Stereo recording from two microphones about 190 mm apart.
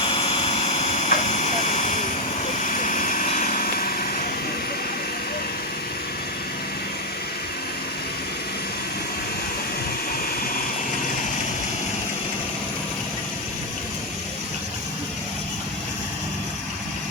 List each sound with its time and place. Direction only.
0.0 s vehicle: 30° left (ahead or behind); by 4.3 s 50° left (ahead or behind)